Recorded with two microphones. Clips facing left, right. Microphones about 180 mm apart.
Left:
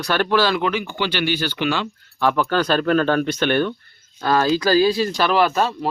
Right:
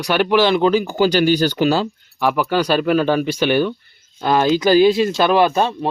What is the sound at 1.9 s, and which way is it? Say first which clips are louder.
Speech: right 1 dB; 10° right (ahead or behind).